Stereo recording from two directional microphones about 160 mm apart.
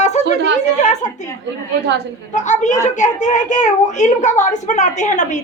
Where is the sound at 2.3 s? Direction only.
50° left (ahead or behind).